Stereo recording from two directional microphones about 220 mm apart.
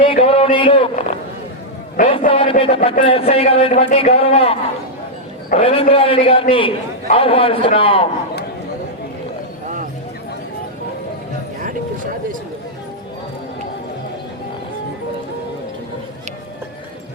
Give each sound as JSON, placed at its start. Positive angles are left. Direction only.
{"t": 0.0, "sound": "a man's voice", "side_deg": 25}
{"t": 2.0, "sound": "a man's voice", "side_deg": 35}
{"t": 2.3, "sound": "a man's voice", "side_deg": 25}